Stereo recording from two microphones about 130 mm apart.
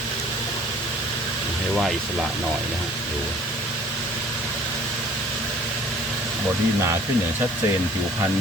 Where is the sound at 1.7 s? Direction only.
5° left (ahead or behind).